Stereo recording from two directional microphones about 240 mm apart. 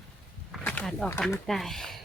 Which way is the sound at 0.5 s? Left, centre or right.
Centre.